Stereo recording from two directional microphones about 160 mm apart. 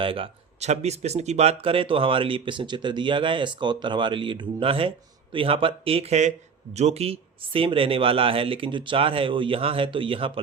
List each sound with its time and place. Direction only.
0.0 s speech: 35° right (ahead or behind)